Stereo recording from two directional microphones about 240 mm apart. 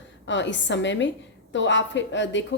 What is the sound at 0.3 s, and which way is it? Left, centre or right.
A woman's voice, left.